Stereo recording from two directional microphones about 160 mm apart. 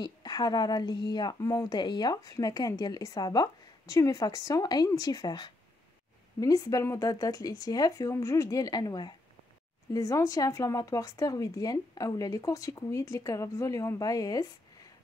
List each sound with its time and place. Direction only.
0.0 s speech: 25° left (ahead or behind)